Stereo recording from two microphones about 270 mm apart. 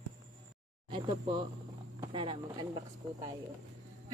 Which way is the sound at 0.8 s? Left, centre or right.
Centre.